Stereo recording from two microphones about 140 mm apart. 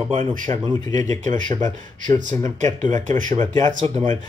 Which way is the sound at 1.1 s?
65° right (ahead or behind).